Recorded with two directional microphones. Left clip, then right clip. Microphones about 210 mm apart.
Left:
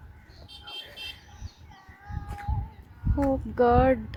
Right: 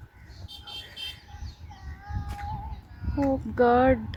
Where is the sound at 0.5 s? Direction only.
35° right (ahead or behind).